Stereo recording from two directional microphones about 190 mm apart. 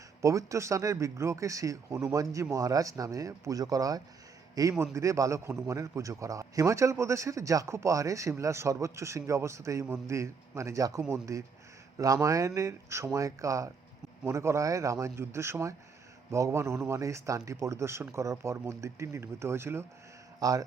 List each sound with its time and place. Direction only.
0.2 s a man's voice: 15° right (ahead or behind)